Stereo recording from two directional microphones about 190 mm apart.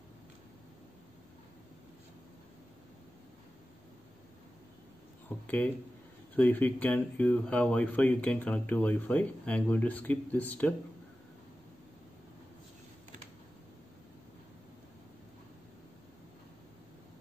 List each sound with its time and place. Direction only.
6.3 s speech: 10° left (ahead or behind)